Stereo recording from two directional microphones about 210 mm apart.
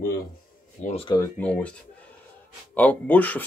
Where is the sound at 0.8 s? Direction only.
25° left (ahead or behind).